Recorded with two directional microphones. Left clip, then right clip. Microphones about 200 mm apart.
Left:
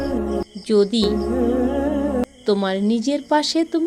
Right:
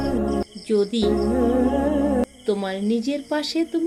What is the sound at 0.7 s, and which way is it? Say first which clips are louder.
Speech: left 4 dB; 40° left (ahead or behind).